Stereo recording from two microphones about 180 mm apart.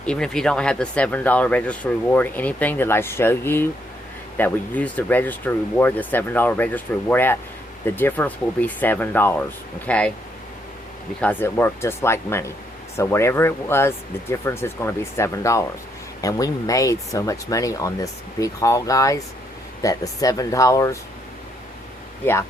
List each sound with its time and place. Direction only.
0.0 s speech: 5° left (ahead or behind)
11.2 s speech: 10° left (ahead or behind)
22.2 s speech: 10° left (ahead or behind)